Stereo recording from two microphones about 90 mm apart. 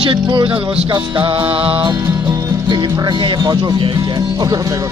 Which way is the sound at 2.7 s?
55° right (ahead or behind).